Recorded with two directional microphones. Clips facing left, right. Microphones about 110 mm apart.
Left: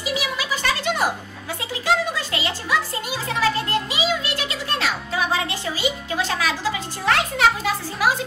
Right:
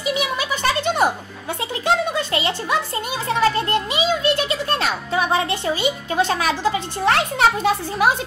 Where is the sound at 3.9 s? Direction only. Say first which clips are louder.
Right 5 dB; 25° right (ahead or behind).